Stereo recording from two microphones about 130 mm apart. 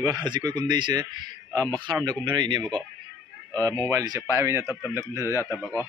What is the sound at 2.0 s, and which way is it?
Speech, 35° right (ahead or behind).